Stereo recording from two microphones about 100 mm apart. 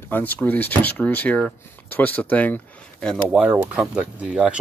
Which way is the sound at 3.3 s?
10° right (ahead or behind).